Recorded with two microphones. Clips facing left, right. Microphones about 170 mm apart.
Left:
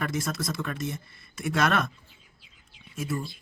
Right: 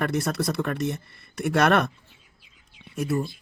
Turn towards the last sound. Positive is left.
turn(degrees=-65)  # may be behind; listen again after turning